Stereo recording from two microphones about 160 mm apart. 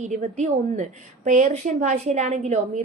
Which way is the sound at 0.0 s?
45° right (ahead or behind).